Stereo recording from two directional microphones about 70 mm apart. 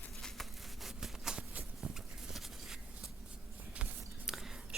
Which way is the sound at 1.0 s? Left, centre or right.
Centre.